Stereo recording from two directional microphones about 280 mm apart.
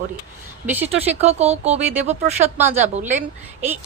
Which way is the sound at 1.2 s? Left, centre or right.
Right.